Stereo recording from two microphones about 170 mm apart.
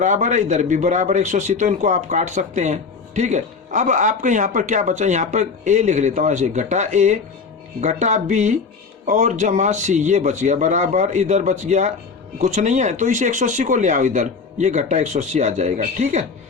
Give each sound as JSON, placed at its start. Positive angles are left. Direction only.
{"t": 0.0, "sound": "speech", "side_deg": -45}